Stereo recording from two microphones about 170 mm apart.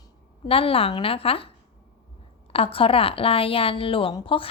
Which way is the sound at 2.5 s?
35° left (ahead or behind).